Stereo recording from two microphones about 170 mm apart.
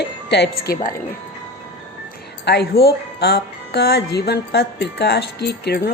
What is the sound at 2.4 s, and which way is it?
Speech, 70° left (ahead or behind).